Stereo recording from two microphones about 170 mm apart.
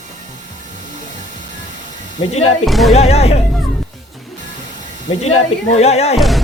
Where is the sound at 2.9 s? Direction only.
40° left (ahead or behind).